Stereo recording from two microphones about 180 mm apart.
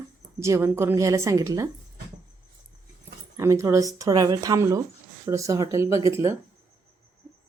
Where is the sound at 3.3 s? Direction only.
15° right (ahead or behind).